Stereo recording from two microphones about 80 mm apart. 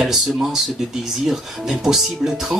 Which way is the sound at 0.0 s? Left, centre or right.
Centre.